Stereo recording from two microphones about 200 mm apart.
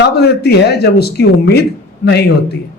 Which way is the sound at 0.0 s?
55° left (ahead or behind).